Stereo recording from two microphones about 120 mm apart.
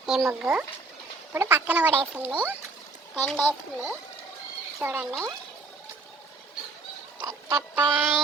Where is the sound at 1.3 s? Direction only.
20° right (ahead or behind).